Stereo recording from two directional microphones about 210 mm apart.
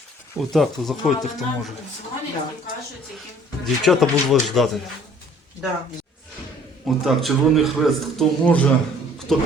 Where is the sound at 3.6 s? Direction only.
Centre (ahead or behind).